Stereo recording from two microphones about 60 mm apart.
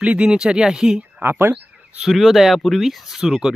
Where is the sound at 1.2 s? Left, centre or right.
Right.